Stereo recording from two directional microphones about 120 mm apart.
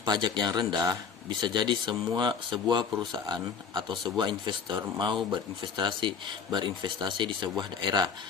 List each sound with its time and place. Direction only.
0.0 s speech: 40° right (ahead or behind)